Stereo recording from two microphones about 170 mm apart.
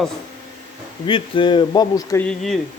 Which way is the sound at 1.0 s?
30° left (ahead or behind).